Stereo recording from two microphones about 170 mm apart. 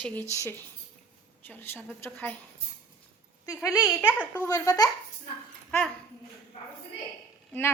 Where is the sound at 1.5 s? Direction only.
10° left (ahead or behind).